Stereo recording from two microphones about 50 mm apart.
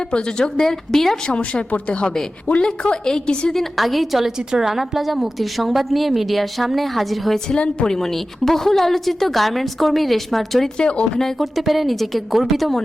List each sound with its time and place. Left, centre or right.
0.1 s speech: centre
1.3 s speech: left
3.6 s a woman's voice: centre
10.8 s speech: left
11.2 s a woman's voice: centre